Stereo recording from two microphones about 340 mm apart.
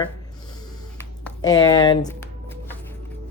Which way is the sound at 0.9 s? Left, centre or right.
Centre.